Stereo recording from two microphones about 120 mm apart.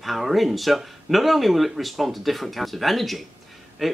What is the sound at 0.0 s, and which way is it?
Speech, centre (ahead or behind).